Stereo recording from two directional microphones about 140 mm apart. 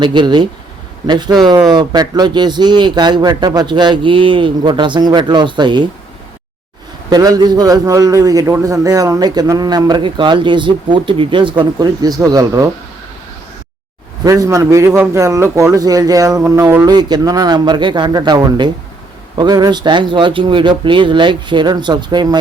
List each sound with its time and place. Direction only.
0.0 s speech: 35° right (ahead or behind)
7.1 s a man's voice: 25° right (ahead or behind)
14.3 s a man's voice: 25° right (ahead or behind)